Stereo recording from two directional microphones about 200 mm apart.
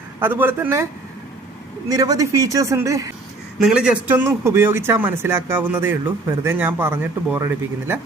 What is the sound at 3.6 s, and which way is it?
Speech, 5° right (ahead or behind).